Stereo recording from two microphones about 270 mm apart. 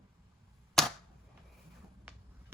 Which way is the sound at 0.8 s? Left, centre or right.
Centre.